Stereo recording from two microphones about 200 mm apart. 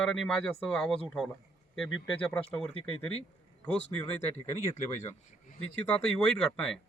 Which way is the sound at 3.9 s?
10° left (ahead or behind).